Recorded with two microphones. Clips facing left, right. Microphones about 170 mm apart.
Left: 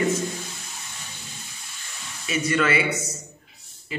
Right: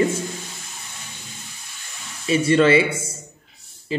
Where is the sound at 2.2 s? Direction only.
30° right (ahead or behind).